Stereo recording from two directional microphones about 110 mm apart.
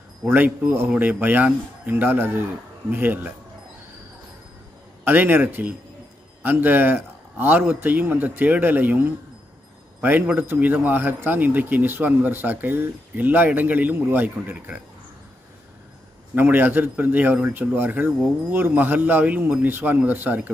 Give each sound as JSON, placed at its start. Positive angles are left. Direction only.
{"t": 0.3, "sound": "a man's voice", "side_deg": -20}
{"t": 5.0, "sound": "a man's voice", "side_deg": -15}
{"t": 16.3, "sound": "a man's voice", "side_deg": -15}